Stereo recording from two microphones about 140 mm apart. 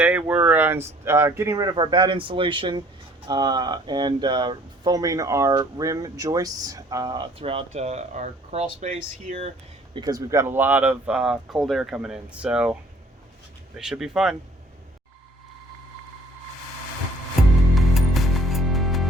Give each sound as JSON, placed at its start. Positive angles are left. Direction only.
{"t": 0.0, "sound": "speech", "side_deg": -10}
{"t": 7.3, "sound": "speech", "side_deg": -45}
{"t": 9.9, "sound": "speech", "side_deg": -30}
{"t": 13.7, "sound": "speech", "side_deg": -5}
{"t": 17.7, "sound": "music", "side_deg": 0}